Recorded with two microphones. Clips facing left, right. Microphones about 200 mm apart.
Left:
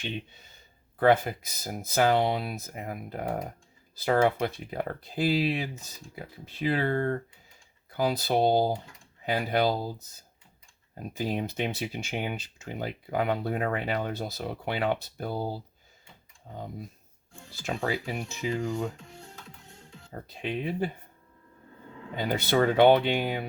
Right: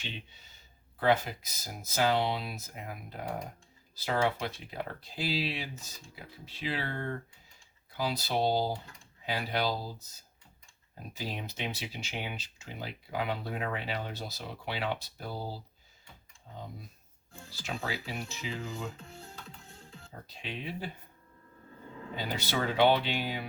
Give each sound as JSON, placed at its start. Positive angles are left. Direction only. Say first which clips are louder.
{"t": 0.9, "sound": "speech", "louder": "left 5 dB", "side_deg": 50}
{"t": 11.1, "sound": "speech", "louder": "left 9 dB", "side_deg": 55}
{"t": 17.5, "sound": "speech", "louder": "left 7 dB", "side_deg": 50}
{"t": 18.9, "sound": "music", "louder": "left 1 dB", "side_deg": 0}
{"t": 20.2, "sound": "speech", "louder": "left 9 dB", "side_deg": 55}
{"t": 22.1, "sound": "speech", "louder": "left 8 dB", "side_deg": 55}